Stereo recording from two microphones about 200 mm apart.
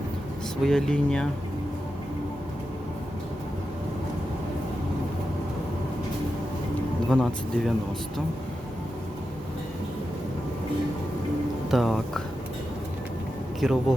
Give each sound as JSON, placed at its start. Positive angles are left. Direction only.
{"t": 0.6, "sound": "speech", "side_deg": 0}
{"t": 7.1, "sound": "speech", "side_deg": 5}
{"t": 11.7, "sound": "speech", "side_deg": 0}
{"t": 13.6, "sound": "speech", "side_deg": 0}